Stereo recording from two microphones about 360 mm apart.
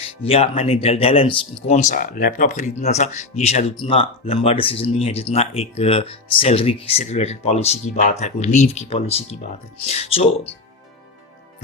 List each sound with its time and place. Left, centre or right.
0.2 s speech: centre